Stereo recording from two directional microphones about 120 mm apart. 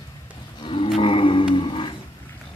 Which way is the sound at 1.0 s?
45° left (ahead or behind).